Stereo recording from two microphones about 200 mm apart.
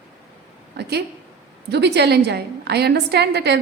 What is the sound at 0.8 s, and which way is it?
A woman's voice, 55° right (ahead or behind).